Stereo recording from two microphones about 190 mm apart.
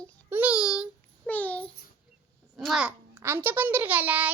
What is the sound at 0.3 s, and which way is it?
Child singing, 10° right (ahead or behind).